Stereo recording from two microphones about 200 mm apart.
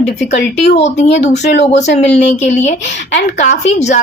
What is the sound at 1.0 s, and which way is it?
Speech, 60° left (ahead or behind).